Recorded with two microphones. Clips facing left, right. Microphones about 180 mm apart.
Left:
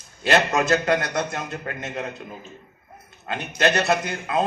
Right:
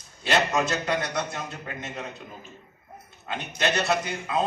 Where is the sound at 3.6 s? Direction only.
50° left (ahead or behind).